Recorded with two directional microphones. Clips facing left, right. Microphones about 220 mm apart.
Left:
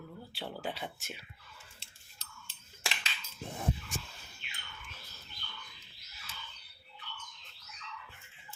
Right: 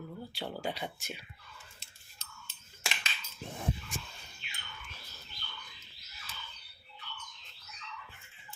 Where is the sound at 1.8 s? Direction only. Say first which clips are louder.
Right 1 dB; 35° left (ahead or behind).